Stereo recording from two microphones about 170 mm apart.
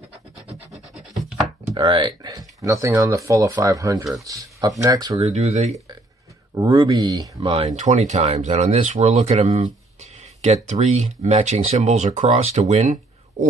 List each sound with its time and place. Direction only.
1.7 s speech: 30° right (ahead or behind)
5.2 s speech: 40° right (ahead or behind)
6.5 s speech: 25° right (ahead or behind)
7.8 s speech: 45° right (ahead or behind)